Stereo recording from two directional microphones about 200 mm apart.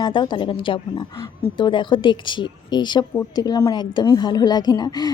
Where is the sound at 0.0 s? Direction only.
25° left (ahead or behind).